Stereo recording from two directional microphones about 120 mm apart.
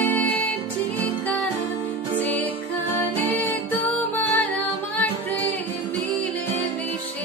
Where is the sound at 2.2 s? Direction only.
15° left (ahead or behind).